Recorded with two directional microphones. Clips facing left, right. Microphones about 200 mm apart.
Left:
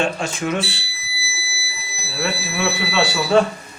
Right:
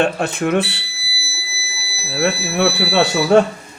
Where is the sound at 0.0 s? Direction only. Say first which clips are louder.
Right 4 dB; 60° right (ahead or behind).